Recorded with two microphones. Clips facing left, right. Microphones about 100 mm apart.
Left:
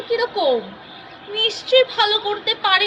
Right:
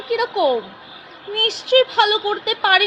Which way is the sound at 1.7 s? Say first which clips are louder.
Right 1 dB; 50° right (ahead or behind).